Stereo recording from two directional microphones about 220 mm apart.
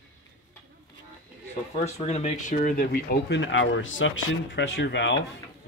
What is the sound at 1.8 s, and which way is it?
Speech, 30° left (ahead or behind).